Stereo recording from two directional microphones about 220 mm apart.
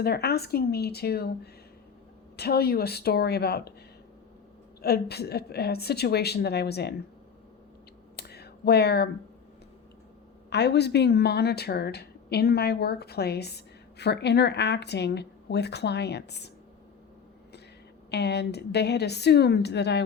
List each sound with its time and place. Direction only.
0.0 s speech: 45° left (ahead or behind)
2.3 s speech: 45° left (ahead or behind)
4.8 s speech: 45° left (ahead or behind)
8.1 s a sound: 45° left (ahead or behind)
10.5 s speech: 50° left (ahead or behind)
18.1 s speech: 50° left (ahead or behind)